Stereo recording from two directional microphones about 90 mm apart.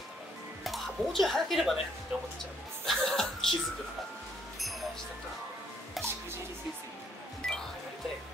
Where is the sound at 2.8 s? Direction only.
5° left (ahead or behind).